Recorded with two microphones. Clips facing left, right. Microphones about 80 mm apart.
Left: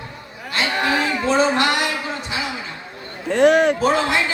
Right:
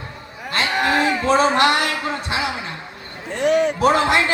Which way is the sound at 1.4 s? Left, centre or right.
Right.